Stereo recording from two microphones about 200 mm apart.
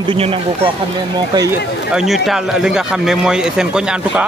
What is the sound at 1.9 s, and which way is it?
Speech, centre (ahead or behind).